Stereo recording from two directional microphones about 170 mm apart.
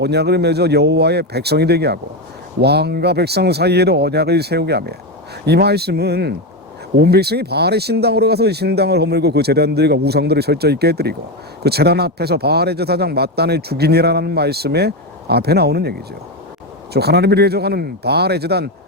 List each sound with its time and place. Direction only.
0.0 s speech: 75° right (ahead or behind)